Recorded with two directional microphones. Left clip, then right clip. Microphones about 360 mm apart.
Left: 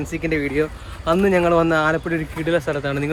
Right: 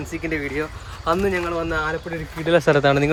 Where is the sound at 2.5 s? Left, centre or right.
Right.